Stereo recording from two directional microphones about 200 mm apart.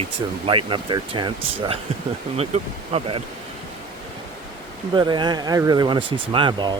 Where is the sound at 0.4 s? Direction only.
25° right (ahead or behind).